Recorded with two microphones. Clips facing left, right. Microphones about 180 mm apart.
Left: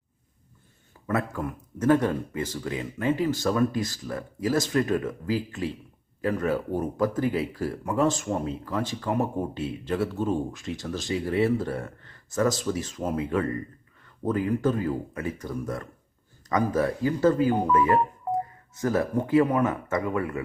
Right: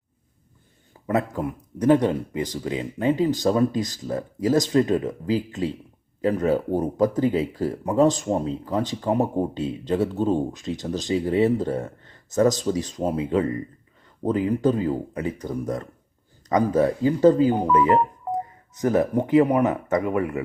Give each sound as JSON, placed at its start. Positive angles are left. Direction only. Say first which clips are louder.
{"t": 1.0, "sound": "speech", "louder": "right 4 dB", "side_deg": -20}
{"t": 8.3, "sound": "speech", "louder": "right 4 dB", "side_deg": -30}
{"t": 8.6, "sound": "speech", "louder": "right 4 dB", "side_deg": -20}
{"t": 12.9, "sound": "speech", "louder": "right 4 dB", "side_deg": -30}
{"t": 14.3, "sound": "speech", "louder": "right 3 dB", "side_deg": -20}